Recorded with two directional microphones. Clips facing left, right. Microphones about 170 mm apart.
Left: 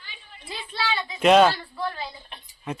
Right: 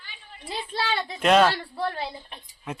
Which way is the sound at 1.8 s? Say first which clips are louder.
Right 2 dB; 60° right (ahead or behind).